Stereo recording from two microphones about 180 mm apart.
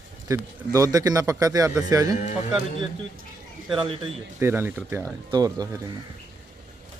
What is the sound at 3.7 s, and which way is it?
Speech, 25° right (ahead or behind).